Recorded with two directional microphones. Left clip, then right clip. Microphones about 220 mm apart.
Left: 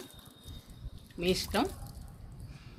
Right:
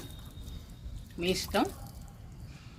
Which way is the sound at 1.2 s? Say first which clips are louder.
Right 1 dB; 40° left (ahead or behind).